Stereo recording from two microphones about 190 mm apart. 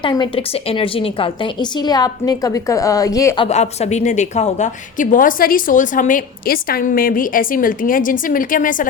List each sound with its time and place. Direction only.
0.0 s a woman's voice: 25° left (ahead or behind)
3.4 s a woman's voice: 35° left (ahead or behind)